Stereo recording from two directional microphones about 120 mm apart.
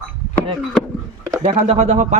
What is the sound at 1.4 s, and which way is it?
Speech, 60° right (ahead or behind).